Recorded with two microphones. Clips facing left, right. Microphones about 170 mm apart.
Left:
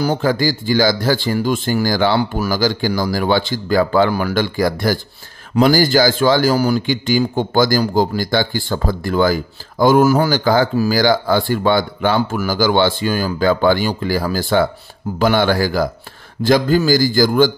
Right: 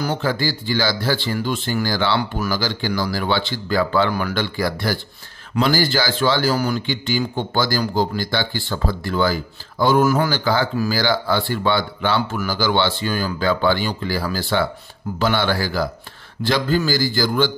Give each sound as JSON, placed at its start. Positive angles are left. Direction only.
{"t": 0.0, "sound": "a man's voice", "side_deg": 45}